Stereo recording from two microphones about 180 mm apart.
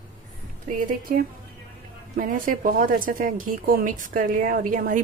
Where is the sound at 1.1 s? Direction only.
50° right (ahead or behind).